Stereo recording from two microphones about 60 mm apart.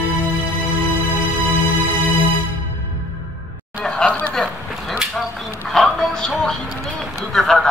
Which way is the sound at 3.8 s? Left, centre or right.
Centre.